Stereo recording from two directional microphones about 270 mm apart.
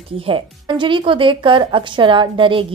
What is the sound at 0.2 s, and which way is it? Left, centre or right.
A woman's voice, centre.